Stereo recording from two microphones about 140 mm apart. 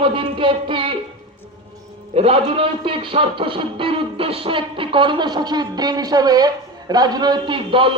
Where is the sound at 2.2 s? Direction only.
45° right (ahead or behind).